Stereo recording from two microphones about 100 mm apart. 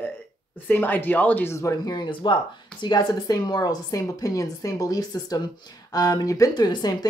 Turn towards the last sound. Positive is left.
turn(degrees=45)  # may be behind; listen again after turning